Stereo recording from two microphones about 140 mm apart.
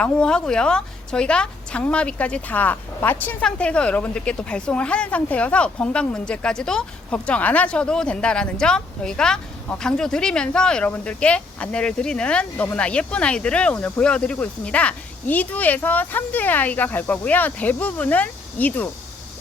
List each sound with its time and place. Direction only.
0.0 s a woman's voice: 5° left (ahead or behind)